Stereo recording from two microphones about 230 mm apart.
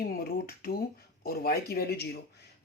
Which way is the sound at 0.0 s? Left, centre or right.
Left.